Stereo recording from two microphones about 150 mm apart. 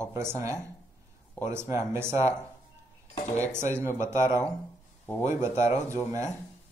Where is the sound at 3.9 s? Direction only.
20° right (ahead or behind).